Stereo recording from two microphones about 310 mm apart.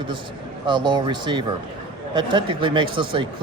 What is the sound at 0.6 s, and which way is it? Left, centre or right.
Speech, centre.